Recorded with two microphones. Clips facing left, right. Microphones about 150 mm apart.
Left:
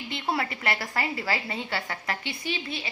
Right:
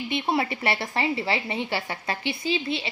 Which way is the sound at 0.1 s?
20° right (ahead or behind).